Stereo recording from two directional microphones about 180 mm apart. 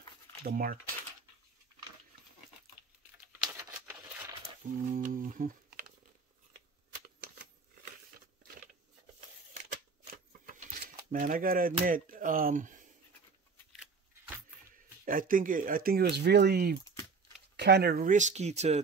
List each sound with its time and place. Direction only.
0.4 s speech: 55° right (ahead or behind)
4.7 s a sound: 45° right (ahead or behind)
10.4 s speech: 50° right (ahead or behind)
15.0 s speech: 50° right (ahead or behind)